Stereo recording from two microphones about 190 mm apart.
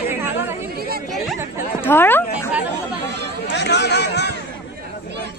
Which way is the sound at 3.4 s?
65° left (ahead or behind).